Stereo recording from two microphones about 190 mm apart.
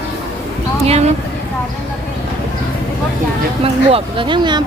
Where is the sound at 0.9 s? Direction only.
35° right (ahead or behind).